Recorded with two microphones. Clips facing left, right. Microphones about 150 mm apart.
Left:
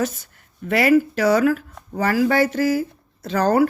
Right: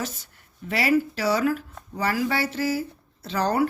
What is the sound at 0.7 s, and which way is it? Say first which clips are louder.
Speech: left 6 dB; 50° left (ahead or behind).